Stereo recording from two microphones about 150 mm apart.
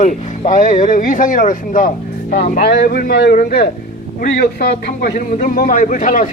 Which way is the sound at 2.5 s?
90° left.